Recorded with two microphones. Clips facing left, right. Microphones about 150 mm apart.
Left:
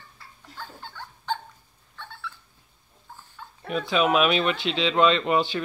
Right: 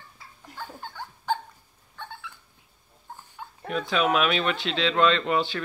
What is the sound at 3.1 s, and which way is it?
Dog, 15° right (ahead or behind).